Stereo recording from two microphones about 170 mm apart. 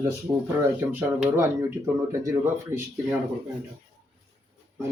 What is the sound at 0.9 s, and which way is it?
A man's voice, 10° right (ahead or behind).